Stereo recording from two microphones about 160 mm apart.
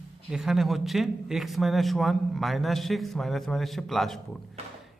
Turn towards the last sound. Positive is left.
turn(degrees=0)  # may be behind; listen again after turning